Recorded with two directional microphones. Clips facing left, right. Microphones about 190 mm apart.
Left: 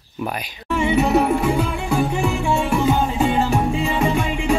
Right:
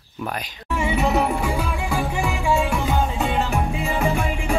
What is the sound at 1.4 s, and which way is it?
Music, 30° left (ahead or behind).